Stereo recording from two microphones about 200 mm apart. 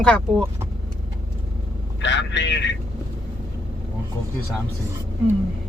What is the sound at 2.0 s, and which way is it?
Vehicle, 65° left (ahead or behind).